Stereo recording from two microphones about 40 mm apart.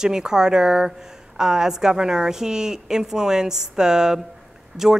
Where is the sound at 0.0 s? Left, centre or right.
Centre.